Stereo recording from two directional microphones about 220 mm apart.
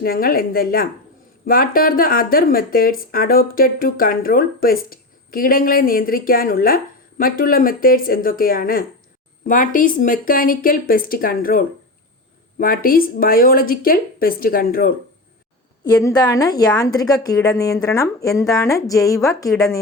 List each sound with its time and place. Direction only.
0.0 s speech: 40° left (ahead or behind)
15.8 s a woman's voice: 15° left (ahead or behind)